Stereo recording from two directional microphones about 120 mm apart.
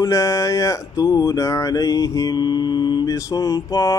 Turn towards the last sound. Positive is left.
turn(degrees=30)  # may be behind; listen again after turning